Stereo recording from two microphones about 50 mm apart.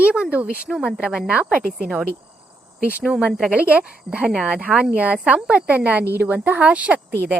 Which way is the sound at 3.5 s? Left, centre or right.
Right.